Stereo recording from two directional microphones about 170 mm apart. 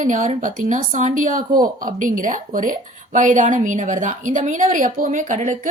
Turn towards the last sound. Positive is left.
turn(degrees=-45)  # may be behind; listen again after turning